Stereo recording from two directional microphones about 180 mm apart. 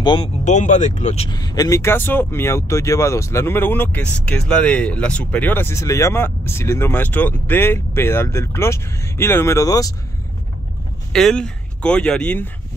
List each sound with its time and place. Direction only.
0.0 s speech: 25° left (ahead or behind)
0.5 s speech: 40° left (ahead or behind)
1.3 s speech: 20° left (ahead or behind)
11.1 s speech: 5° left (ahead or behind)